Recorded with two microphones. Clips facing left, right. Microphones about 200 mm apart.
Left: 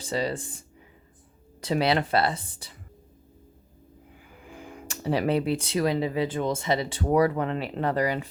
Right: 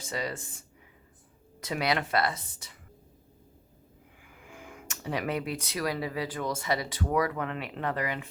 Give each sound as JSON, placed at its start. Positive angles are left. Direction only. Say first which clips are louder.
{"t": 0.0, "sound": "speech", "louder": "left 6 dB", "side_deg": 30}
{"t": 1.6, "sound": "speech", "louder": "left 6 dB", "side_deg": 30}
{"t": 4.3, "sound": "speech", "louder": "left 4 dB", "side_deg": 35}